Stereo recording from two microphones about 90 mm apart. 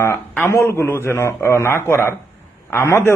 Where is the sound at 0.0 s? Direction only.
25° left (ahead or behind).